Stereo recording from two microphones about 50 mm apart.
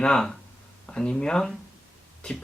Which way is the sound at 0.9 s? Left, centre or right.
Centre.